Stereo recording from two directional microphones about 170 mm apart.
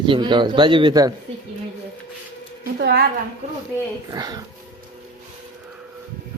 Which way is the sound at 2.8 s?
75° right (ahead or behind).